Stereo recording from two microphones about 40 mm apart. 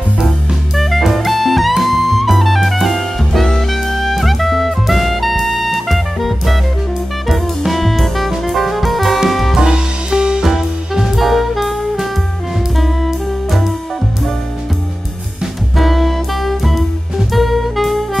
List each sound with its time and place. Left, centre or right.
0.7 s jazz: centre
1.7 s music: centre
9.6 s music: centre
10.4 s music: centre
12.7 s saxophone: centre
15.8 s music: centre